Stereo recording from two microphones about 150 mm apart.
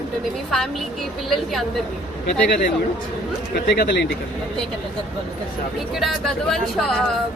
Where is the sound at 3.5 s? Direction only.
90° left.